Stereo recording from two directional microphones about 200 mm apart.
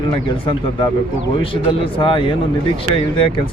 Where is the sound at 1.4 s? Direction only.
25° left (ahead or behind).